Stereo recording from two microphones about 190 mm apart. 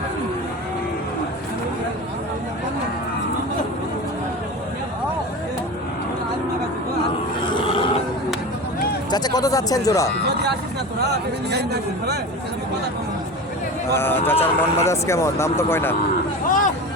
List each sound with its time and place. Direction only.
7.4 s grunt: 25° left (ahead or behind)
9.0 s speech: 20° left (ahead or behind)
11.1 s speech: 60° right (ahead or behind)
13.9 s speech: 10° left (ahead or behind)
16.5 s hubbub: 45° left (ahead or behind)